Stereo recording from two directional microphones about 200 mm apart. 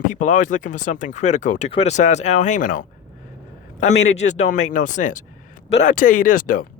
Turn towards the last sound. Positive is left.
turn(degrees=45)  # may be behind; listen again after turning